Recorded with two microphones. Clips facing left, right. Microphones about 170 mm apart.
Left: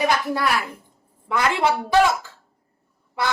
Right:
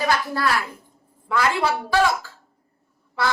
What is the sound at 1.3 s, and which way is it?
A woman's voice, 20° left (ahead or behind).